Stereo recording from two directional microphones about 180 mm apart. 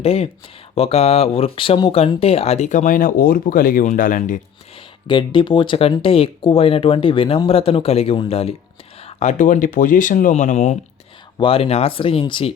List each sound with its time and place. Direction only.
0.0 s speech: 35° left (ahead or behind)
5.0 s speech: 25° left (ahead or behind)